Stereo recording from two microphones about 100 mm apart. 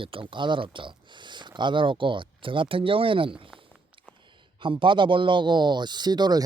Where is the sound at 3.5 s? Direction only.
Centre (ahead or behind).